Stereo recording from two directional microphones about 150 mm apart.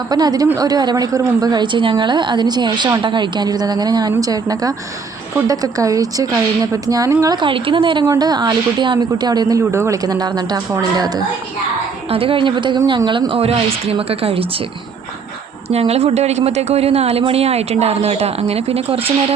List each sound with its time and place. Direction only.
0.1 s a woman's voice: 25° right (ahead or behind)
7.4 s a woman's voice: 35° right (ahead or behind)
12.1 s speech: 35° right (ahead or behind)
15.7 s a woman's voice: 45° right (ahead or behind)